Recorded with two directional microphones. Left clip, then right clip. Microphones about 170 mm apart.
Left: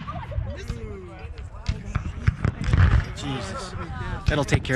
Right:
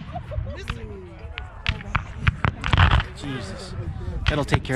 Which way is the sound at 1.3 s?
10° right (ahead or behind).